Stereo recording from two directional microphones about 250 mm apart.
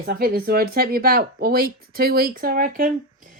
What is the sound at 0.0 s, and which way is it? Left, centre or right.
Speech, right.